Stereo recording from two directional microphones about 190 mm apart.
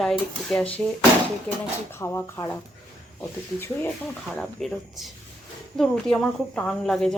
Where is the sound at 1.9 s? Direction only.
15° left (ahead or behind).